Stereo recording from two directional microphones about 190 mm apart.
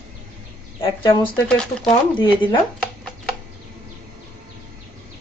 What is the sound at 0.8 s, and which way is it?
Speech, 25° left (ahead or behind).